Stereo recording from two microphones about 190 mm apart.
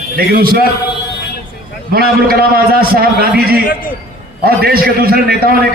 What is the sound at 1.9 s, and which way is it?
A man's voice, 55° right (ahead or behind).